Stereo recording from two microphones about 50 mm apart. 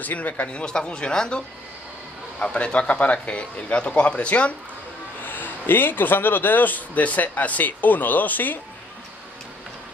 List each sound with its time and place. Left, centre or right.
0.0 s a man's voice: left
5.2 s speech: left